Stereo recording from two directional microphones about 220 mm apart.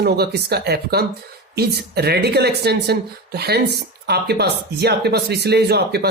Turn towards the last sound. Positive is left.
turn(degrees=-45)  # may be behind; listen again after turning